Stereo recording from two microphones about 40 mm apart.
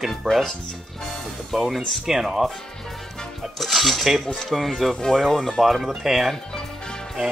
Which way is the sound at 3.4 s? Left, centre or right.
Centre.